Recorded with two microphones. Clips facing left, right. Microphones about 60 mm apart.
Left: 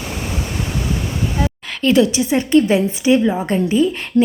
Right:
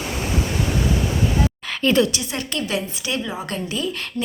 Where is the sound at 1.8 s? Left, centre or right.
Centre.